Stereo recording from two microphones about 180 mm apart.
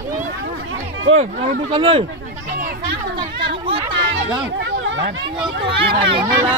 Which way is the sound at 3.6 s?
30° right (ahead or behind).